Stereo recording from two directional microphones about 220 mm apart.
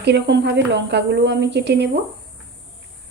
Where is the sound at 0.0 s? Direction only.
50° right (ahead or behind).